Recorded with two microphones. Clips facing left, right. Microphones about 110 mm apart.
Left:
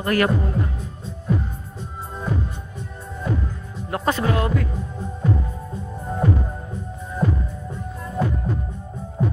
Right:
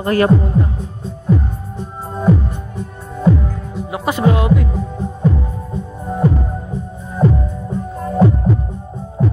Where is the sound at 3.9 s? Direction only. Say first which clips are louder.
Right 5 dB; 15° right (ahead or behind).